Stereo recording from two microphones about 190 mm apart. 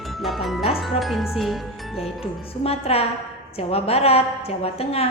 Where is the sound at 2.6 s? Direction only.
30° left (ahead or behind).